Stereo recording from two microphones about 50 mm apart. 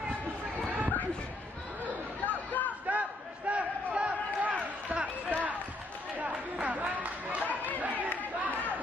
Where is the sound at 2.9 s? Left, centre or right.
Right.